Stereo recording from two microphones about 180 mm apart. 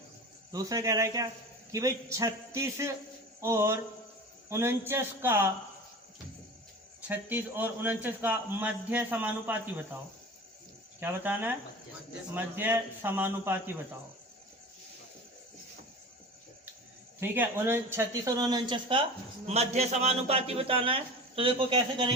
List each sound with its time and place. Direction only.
0.5 s a man's voice: 20° right (ahead or behind)
7.1 s a man's voice: 10° right (ahead or behind)
11.0 s a man's voice: 10° right (ahead or behind)
17.2 s speech: 10° right (ahead or behind)
19.5 s a man's voice: 35° right (ahead or behind)